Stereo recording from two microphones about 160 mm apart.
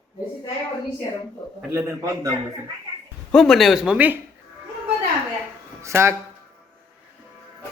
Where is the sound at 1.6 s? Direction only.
15° right (ahead or behind).